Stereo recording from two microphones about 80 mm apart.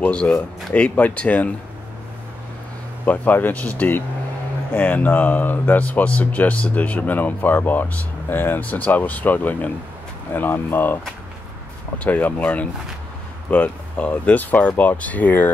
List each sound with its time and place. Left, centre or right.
0.0 s speech: centre
3.1 s speech: left
12.0 s speech: centre